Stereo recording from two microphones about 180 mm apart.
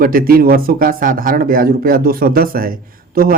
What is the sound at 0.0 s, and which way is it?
Speech, 55° right (ahead or behind).